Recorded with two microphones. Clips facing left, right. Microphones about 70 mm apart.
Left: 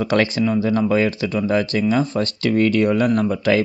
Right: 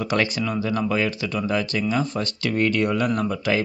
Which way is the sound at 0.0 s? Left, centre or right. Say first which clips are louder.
Left 5 dB; left.